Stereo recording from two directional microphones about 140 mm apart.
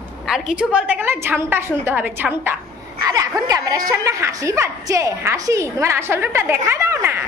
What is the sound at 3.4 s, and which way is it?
A woman's voice, 25° right (ahead or behind).